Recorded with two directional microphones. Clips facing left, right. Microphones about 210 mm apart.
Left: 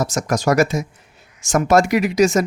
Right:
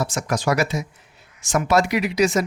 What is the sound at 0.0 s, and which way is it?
Speech, 45° left (ahead or behind).